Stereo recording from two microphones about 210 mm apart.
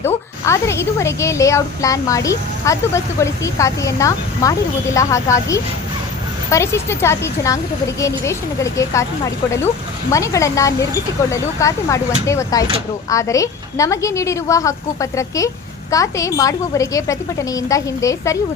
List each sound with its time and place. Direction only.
0.0 s speech: 15° left (ahead or behind)
10.1 s speech: 15° left (ahead or behind)